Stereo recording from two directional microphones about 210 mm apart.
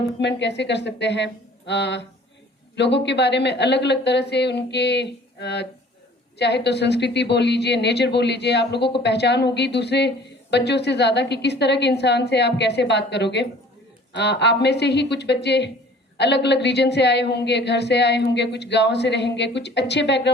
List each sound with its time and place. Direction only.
0.2 s a woman's voice: 55° left (ahead or behind)